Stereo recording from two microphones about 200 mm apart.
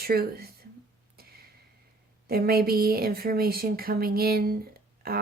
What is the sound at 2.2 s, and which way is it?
Speech, 50° right (ahead or behind).